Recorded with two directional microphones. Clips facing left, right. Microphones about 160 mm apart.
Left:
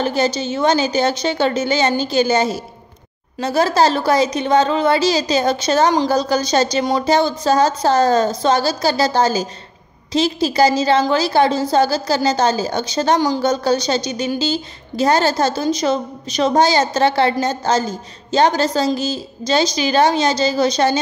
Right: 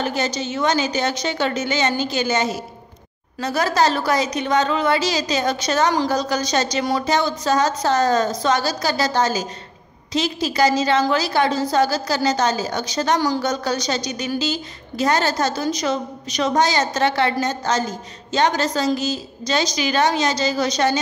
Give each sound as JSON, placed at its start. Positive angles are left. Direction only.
{"t": 0.0, "sound": "a woman's voice", "side_deg": 30}